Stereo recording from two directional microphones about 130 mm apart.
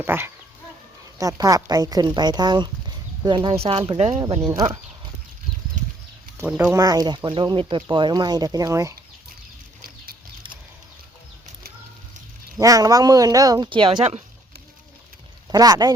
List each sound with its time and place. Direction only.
0.0 s speech: 15° right (ahead or behind)
1.2 s speech: 25° right (ahead or behind)
3.5 s speech: 50° right (ahead or behind)
4.4 s speech: 30° right (ahead or behind)
6.5 s speech: 10° right (ahead or behind)
6.7 s speech: 30° right (ahead or behind)
12.5 s speech: 25° right (ahead or behind)
15.4 s speech: 30° right (ahead or behind)